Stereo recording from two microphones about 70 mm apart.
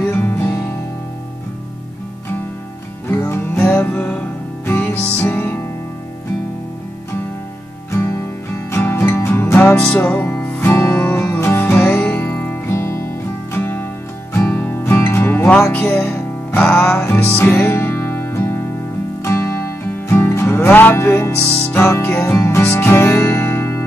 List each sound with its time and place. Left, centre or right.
0.0 s music: left
3.3 s music: left
8.7 s music: left
9.8 s music: centre
10.1 s music: left
12.7 s music: left
13.5 s music: left
16.7 s music: centre
17.0 s music: left